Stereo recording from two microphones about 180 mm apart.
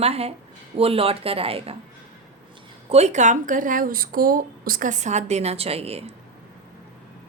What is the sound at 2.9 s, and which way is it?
Speech, 40° right (ahead or behind).